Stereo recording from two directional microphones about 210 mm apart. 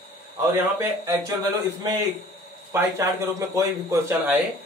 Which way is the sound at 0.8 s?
15° right (ahead or behind).